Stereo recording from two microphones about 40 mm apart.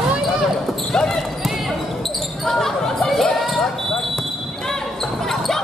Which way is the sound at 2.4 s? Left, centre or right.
Centre.